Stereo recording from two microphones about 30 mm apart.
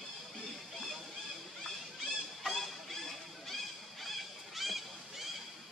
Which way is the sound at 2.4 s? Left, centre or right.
Centre.